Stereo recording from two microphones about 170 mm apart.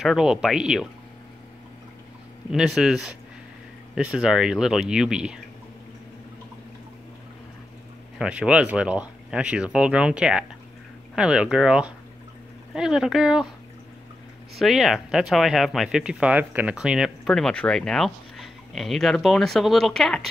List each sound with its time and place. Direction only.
0.0 s speech: centre (ahead or behind)
2.5 s speech: 5° right (ahead or behind)
8.2 s speech: 5° right (ahead or behind)
14.6 s speech: centre (ahead or behind)